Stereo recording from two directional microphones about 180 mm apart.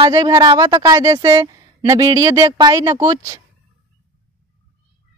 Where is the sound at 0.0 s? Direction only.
20° right (ahead or behind).